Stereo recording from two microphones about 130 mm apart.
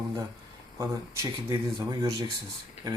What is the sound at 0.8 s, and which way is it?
Speech, 25° right (ahead or behind).